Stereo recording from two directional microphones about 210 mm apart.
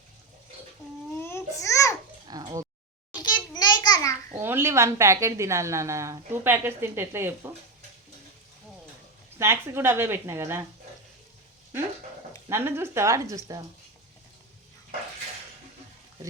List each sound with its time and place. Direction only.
1.2 s babbling: 10° left (ahead or behind)
2.2 s a sound: 20° right (ahead or behind)
3.2 s a sound: 20° left (ahead or behind)
4.4 s a woman's voice: 10° right (ahead or behind)
9.4 s a woman's voice: 10° right (ahead or behind)
12.5 s a woman's voice: 10° right (ahead or behind)